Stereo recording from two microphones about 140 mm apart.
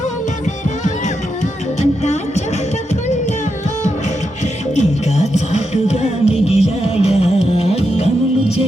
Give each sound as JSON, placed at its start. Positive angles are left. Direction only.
{"t": 1.8, "sound": "music", "side_deg": 55}
{"t": 4.7, "sound": "music", "side_deg": 55}